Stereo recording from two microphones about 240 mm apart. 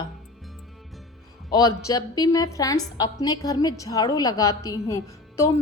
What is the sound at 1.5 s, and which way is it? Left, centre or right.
A woman's voice, centre.